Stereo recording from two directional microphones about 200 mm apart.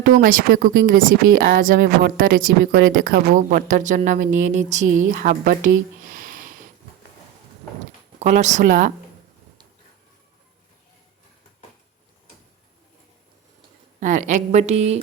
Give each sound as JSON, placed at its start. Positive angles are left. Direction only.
{"t": 0.0, "sound": "speech", "side_deg": -45}
{"t": 8.2, "sound": "a woman's voice", "side_deg": -35}
{"t": 14.0, "sound": "a woman's voice", "side_deg": -40}